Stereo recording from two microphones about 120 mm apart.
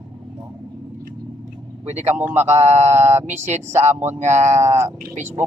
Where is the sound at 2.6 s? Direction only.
65° right (ahead or behind).